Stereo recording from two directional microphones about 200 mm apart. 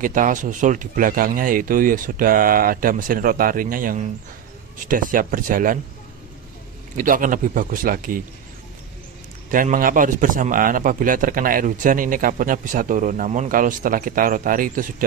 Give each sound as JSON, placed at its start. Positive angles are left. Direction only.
{"t": 0.0, "sound": "a man's voice", "side_deg": -40}
{"t": 7.0, "sound": "a man's voice", "side_deg": -40}
{"t": 9.5, "sound": "a man's voice", "side_deg": -45}